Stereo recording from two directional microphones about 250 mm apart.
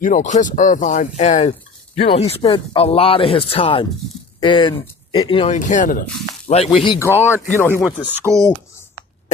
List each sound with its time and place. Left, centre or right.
0.0 s speech: left; by 8.1 s centre
8.2 s speech: centre